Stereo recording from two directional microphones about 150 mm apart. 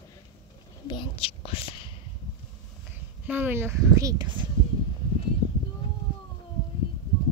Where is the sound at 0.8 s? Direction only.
35° left (ahead or behind).